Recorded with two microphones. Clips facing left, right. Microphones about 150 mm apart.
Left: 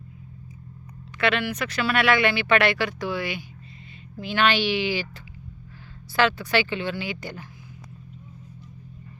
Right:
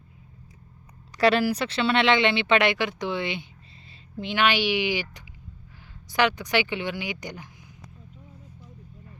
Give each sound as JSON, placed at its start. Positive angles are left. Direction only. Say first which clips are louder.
{"t": 1.2, "sound": "speech", "louder": "right 4 dB", "side_deg": -35}